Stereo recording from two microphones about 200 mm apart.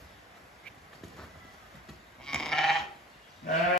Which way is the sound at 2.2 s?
5° left (ahead or behind).